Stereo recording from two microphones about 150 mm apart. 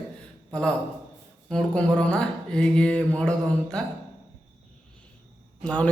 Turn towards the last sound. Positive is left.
turn(degrees=5)  # may be behind; listen again after turning